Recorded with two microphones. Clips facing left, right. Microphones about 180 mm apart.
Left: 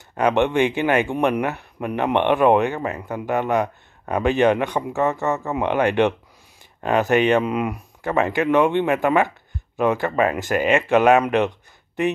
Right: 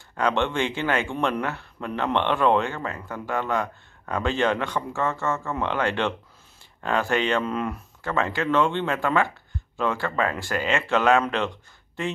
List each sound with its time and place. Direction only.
0.1 s speech: 15° left (ahead or behind)